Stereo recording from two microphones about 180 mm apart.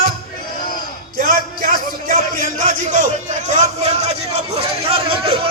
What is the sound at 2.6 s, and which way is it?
Speech, 45° right (ahead or behind).